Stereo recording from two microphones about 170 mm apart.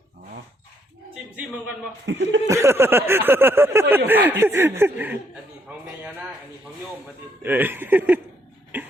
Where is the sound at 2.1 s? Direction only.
90° right.